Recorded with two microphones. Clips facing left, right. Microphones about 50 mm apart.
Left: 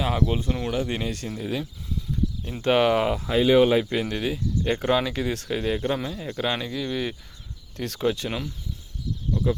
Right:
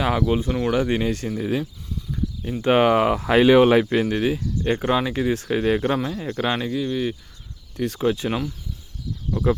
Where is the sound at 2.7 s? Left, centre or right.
Right.